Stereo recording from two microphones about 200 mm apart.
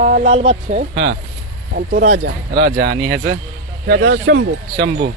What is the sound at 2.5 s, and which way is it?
Speech, 60° right (ahead or behind).